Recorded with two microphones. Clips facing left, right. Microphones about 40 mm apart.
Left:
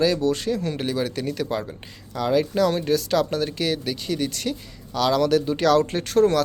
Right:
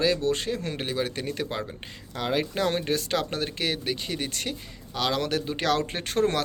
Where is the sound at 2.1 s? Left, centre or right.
Right.